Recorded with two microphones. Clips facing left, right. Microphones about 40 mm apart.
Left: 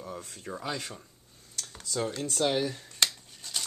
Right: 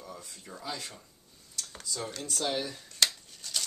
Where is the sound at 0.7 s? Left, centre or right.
Left.